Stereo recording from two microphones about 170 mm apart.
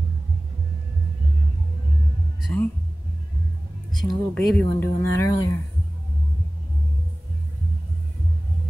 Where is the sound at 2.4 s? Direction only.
5° left (ahead or behind).